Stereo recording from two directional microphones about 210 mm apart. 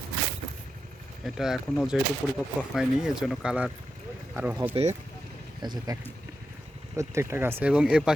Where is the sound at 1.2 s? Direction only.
Centre (ahead or behind).